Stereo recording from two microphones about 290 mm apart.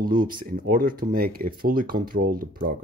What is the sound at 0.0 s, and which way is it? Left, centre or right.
Speech, right.